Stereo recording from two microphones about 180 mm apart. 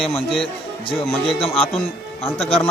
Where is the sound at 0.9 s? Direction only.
30° left (ahead or behind).